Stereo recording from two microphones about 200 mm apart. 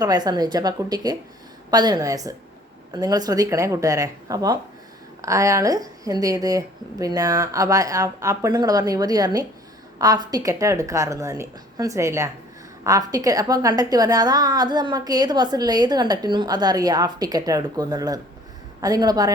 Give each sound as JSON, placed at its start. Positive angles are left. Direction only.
{"t": 0.0, "sound": "a woman's voice", "side_deg": -20}